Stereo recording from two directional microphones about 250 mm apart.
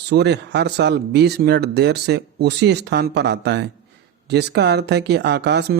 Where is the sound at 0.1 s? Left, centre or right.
Right.